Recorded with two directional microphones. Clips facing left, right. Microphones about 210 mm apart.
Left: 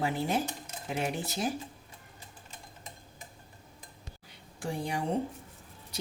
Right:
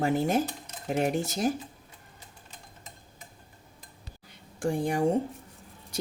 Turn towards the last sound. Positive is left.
turn(degrees=-50)  # may be behind; listen again after turning